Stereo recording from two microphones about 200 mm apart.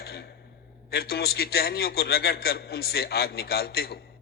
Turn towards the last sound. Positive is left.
turn(degrees=50)  # may be behind; listen again after turning